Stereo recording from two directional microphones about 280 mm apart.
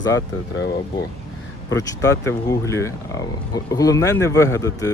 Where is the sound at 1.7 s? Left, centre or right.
Centre.